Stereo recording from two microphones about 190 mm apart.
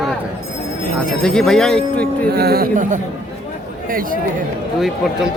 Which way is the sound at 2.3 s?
55° right (ahead or behind).